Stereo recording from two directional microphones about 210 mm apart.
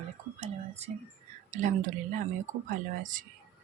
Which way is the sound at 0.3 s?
30° right (ahead or behind).